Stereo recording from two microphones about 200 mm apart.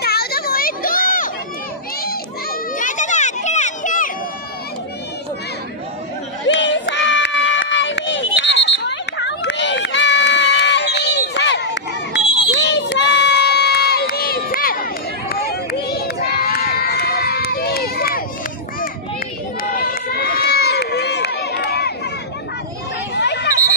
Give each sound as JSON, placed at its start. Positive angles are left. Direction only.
{"t": 0.0, "sound": "children playing", "side_deg": 50}
{"t": 2.8, "sound": "a sound", "side_deg": 40}
{"t": 6.4, "sound": "run", "side_deg": 65}
{"t": 12.4, "sound": "crowd", "side_deg": 60}
{"t": 15.9, "sound": "run", "side_deg": 50}
{"t": 19.7, "sound": "run", "side_deg": 50}
{"t": 23.1, "sound": "a sound", "side_deg": 55}